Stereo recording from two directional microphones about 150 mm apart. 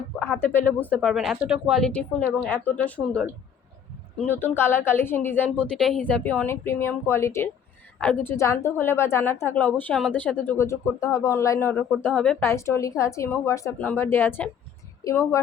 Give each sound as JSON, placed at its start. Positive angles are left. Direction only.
{"t": 0.2, "sound": "speech", "side_deg": 15}
{"t": 1.0, "sound": "a woman's voice", "side_deg": 0}
{"t": 5.6, "sound": "a woman's voice", "side_deg": 5}